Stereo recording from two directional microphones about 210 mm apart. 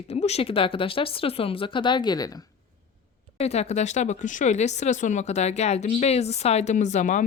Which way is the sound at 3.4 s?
30° left (ahead or behind).